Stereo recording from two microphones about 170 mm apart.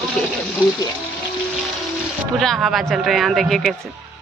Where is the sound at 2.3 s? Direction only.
Centre (ahead or behind).